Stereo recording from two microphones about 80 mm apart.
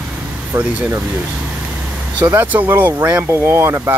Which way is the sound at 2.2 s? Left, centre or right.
Right.